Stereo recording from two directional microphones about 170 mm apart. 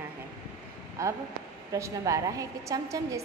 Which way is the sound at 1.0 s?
20° right (ahead or behind).